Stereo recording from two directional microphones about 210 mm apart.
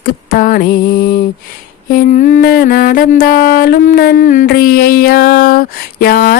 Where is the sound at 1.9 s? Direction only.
40° left (ahead or behind).